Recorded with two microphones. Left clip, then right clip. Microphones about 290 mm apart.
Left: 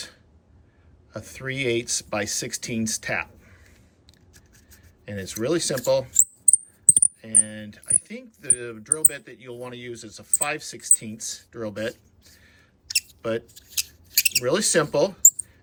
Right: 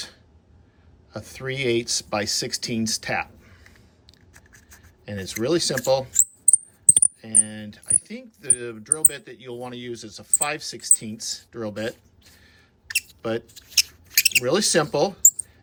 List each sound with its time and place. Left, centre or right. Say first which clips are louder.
1.1 s speech: right 1 dB; centre
5.0 s speech: right 1 dB; centre
12.4 s a sound: right 1 dB; centre
13.5 s speech: right 8 dB; centre
14.1 s a sound: right 1 dB; centre
14.4 s speech: right 1 dB; centre